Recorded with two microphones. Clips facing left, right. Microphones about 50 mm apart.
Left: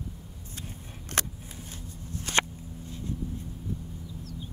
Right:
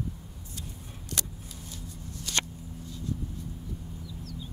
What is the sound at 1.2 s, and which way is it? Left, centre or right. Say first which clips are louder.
Vehicle: left 7 dB; left.